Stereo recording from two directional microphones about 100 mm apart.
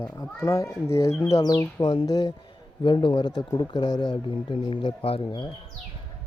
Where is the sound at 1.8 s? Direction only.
60° left (ahead or behind).